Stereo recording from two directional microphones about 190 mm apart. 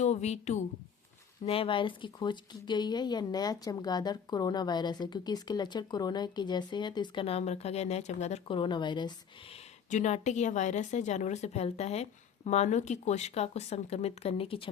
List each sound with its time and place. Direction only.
0.0 s speech: 35° left (ahead or behind)
9.9 s speech: 40° left (ahead or behind)